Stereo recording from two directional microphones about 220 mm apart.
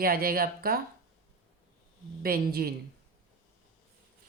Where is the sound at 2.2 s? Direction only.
45° right (ahead or behind).